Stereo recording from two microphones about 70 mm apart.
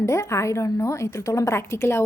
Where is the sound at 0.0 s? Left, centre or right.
Left.